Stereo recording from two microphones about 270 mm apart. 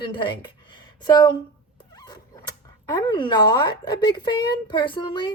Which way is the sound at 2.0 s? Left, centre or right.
Centre.